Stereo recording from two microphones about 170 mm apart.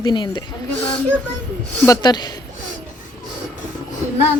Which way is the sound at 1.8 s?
20° left (ahead or behind).